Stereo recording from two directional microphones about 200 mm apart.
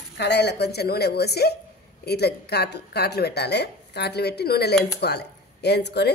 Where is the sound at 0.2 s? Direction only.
55° left (ahead or behind).